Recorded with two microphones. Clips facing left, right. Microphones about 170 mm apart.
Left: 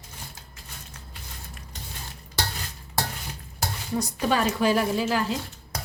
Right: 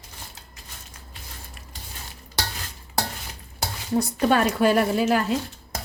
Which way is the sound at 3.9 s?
55° right (ahead or behind).